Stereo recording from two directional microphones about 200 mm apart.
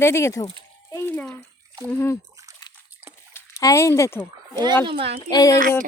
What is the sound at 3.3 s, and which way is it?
Speech, 15° left (ahead or behind).